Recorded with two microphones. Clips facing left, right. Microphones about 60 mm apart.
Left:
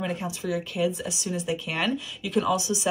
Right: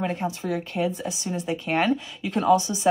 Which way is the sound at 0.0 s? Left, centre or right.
Right.